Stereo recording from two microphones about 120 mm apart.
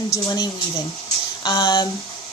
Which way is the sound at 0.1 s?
30° left (ahead or behind).